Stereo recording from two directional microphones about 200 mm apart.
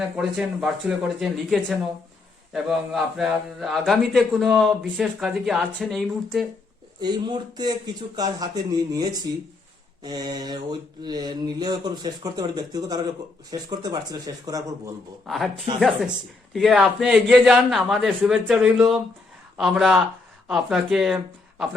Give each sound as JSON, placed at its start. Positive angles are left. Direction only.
{"t": 0.2, "sound": "a man's voice", "side_deg": 0}
{"t": 7.0, "sound": "mantra", "side_deg": -20}
{"t": 15.3, "sound": "a man's voice", "side_deg": 0}
{"t": 16.5, "sound": "a man's voice", "side_deg": 0}